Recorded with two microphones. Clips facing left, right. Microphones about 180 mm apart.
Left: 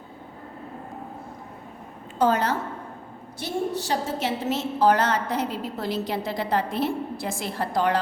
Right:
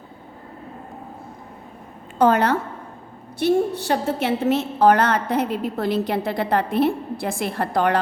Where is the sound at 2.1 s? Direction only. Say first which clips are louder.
Right 5 dB; 60° right (ahead or behind).